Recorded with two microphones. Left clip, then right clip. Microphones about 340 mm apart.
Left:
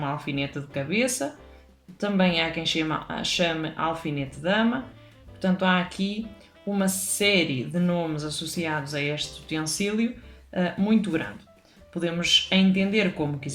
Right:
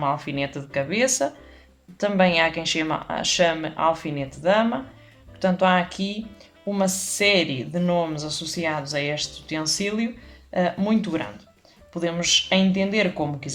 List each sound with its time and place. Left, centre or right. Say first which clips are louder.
0.2 s speech: right 2 dB; centre